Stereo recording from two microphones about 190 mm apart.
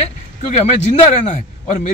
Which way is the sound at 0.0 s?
35° left (ahead or behind).